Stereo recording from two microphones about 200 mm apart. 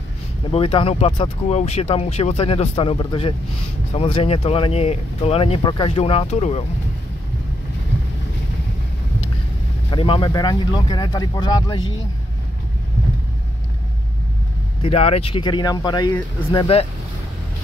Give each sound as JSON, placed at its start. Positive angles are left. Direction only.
{"t": 0.5, "sound": "speech", "side_deg": 30}
{"t": 9.8, "sound": "speech", "side_deg": 25}
{"t": 14.8, "sound": "speech", "side_deg": 30}